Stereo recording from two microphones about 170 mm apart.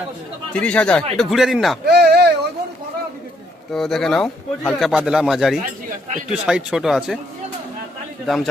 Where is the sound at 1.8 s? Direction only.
70° right (ahead or behind).